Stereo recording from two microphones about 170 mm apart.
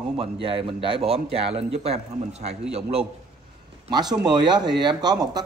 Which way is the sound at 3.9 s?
25° right (ahead or behind).